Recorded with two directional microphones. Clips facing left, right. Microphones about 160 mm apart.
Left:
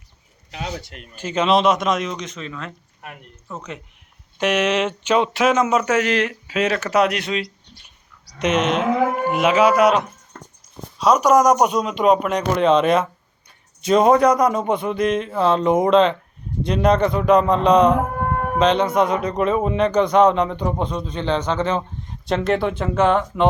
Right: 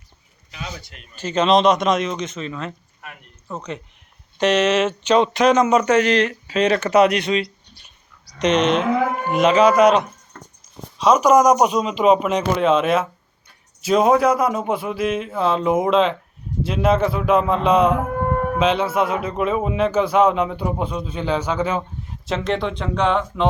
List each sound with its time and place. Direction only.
0.5 s speech: 70° left (ahead or behind)
1.1 s speech: 10° left (ahead or behind)
3.0 s speech: 45° left (ahead or behind)
3.5 s speech: centre (ahead or behind)